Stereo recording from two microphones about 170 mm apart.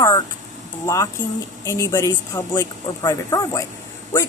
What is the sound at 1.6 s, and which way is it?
A woman's voice, 20° left (ahead or behind).